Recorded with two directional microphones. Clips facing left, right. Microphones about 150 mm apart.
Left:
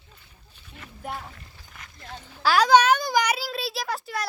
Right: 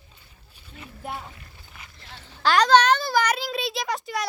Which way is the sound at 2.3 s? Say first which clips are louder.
Even; 5° left (ahead or behind).